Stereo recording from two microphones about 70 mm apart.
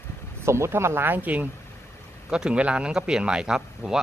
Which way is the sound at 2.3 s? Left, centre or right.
Centre.